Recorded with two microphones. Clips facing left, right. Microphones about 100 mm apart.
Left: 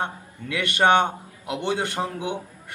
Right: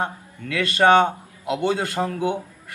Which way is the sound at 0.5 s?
20° left (ahead or behind).